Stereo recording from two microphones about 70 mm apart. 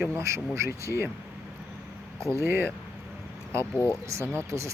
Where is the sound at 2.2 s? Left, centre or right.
Right.